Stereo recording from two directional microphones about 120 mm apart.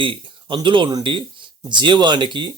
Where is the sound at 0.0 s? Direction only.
45° right (ahead or behind).